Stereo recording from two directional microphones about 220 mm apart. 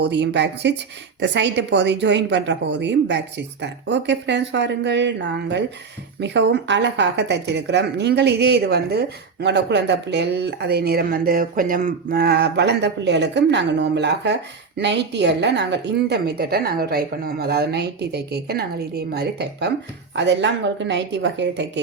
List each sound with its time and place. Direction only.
0.0 s a woman's voice: 50° right (ahead or behind)